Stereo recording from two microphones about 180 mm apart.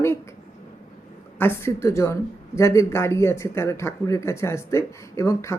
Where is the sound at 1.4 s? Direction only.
15° left (ahead or behind).